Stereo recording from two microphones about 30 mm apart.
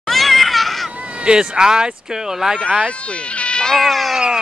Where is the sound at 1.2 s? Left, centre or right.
Right.